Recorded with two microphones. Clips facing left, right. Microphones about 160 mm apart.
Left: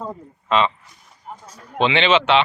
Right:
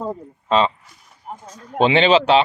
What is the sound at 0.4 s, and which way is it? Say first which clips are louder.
Speech: right 1 dB; 35° right (ahead or behind).